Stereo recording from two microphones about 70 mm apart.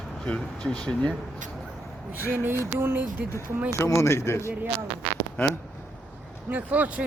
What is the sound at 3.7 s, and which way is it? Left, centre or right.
Speech, left.